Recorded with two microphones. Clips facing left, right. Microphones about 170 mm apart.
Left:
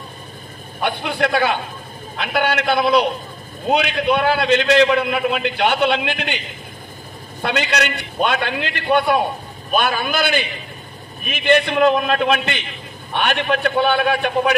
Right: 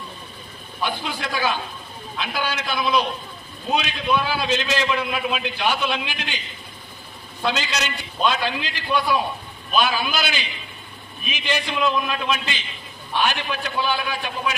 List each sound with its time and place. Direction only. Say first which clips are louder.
0.7 s a man's voice: left 6 dB; 65° left (ahead or behind)
7.4 s a man's voice: left 4 dB; 60° left (ahead or behind)